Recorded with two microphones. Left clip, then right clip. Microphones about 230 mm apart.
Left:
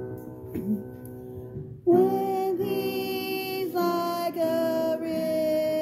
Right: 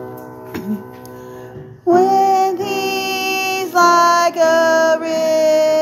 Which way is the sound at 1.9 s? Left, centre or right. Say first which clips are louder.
Right 11 dB; centre.